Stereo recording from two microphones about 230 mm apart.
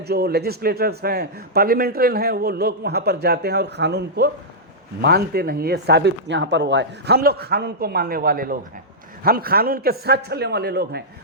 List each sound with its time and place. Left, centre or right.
0.0 s a man's voice: right